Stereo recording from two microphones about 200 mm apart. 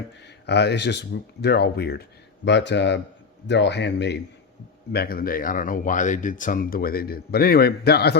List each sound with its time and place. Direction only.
0.4 s speech: 55° left (ahead or behind)